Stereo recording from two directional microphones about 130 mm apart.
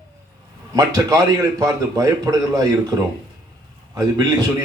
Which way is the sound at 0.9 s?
25° right (ahead or behind).